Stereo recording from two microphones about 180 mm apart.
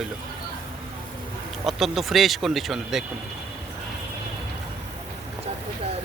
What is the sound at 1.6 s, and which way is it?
Speech, centre (ahead or behind).